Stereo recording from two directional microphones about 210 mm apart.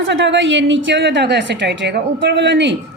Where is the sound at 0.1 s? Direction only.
60° right (ahead or behind).